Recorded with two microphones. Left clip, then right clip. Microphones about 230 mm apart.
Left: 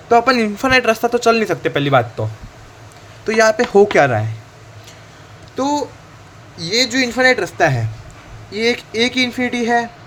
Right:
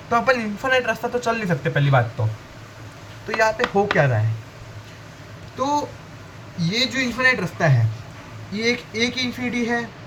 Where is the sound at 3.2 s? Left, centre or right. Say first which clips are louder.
Left 6 dB; left.